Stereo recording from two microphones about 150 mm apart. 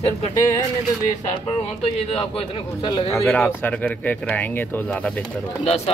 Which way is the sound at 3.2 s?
10° left (ahead or behind).